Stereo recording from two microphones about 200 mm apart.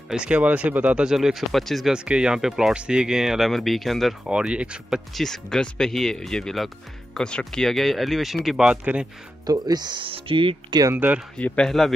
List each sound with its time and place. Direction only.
0.1 s speech: 5° right (ahead or behind)
9.5 s speech: 20° right (ahead or behind)
11.3 s speech: 5° left (ahead or behind)